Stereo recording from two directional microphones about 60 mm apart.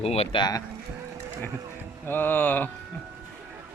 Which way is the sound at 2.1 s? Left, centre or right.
Left.